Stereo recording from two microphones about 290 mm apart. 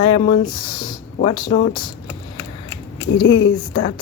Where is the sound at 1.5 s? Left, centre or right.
Left.